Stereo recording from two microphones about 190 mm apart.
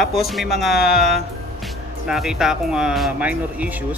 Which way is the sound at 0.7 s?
55° left (ahead or behind).